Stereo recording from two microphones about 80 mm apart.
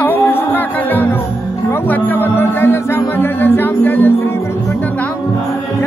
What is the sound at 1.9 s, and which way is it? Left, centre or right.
Music, left.